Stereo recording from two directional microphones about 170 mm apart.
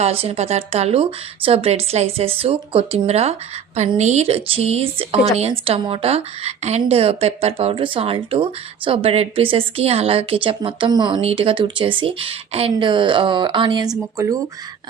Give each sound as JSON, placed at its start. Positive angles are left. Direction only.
{"t": 0.0, "sound": "speech", "side_deg": -35}